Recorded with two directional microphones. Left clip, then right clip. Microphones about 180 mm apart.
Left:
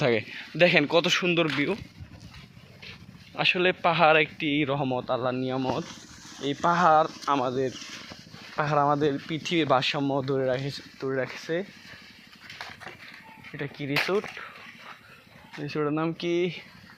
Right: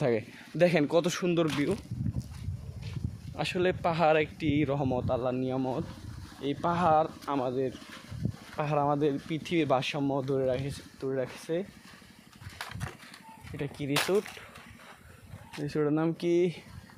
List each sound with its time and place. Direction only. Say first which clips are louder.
0.0 s speech: left 4 dB; 5° left (ahead or behind)
3.3 s speech: left 6 dB; 5° left (ahead or behind)
6.4 s speech: left 6 dB; 25° left (ahead or behind)
13.6 s speech: left 3 dB; 5° right (ahead or behind)
15.6 s speech: left 1 dB; 15° right (ahead or behind)